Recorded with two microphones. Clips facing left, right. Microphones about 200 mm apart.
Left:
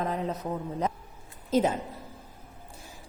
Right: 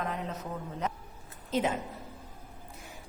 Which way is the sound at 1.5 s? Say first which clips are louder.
Left 5 dB; 35° left (ahead or behind).